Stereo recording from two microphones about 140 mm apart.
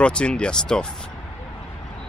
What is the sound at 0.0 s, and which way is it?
Speech, 5° left (ahead or behind).